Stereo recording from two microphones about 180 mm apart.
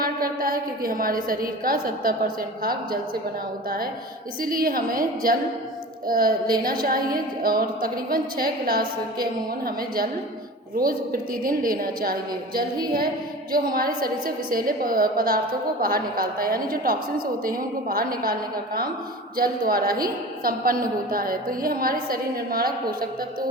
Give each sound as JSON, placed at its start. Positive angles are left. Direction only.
{"t": 0.0, "sound": "a woman's voice", "side_deg": -55}
{"t": 4.4, "sound": "a woman's voice", "side_deg": -50}
{"t": 13.5, "sound": "a woman's voice", "side_deg": -55}